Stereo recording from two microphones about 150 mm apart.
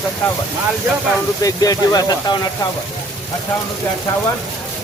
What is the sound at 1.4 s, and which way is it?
Speech, 25° left (ahead or behind).